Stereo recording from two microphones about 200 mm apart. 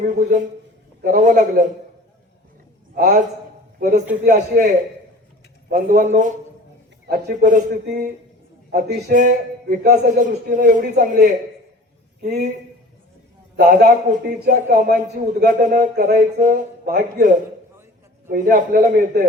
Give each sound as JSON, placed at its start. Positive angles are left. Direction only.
{"t": 0.2, "sound": "a man's voice", "side_deg": -40}
{"t": 2.9, "sound": "a man's voice", "side_deg": -40}
{"t": 13.6, "sound": "speech", "side_deg": -45}